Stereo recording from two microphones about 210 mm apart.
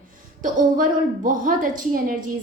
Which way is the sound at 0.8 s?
40° right (ahead or behind).